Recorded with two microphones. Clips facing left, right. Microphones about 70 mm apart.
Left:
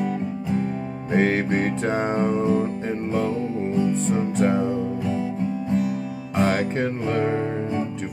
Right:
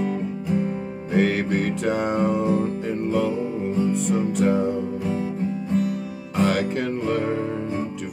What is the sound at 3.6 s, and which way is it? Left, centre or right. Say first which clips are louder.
Music: left 1 dB; left.